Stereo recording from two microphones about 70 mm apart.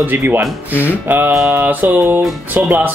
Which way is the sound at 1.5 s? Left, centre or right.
Right.